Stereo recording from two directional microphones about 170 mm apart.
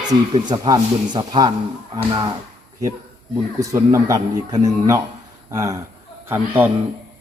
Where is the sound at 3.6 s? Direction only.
20° right (ahead or behind).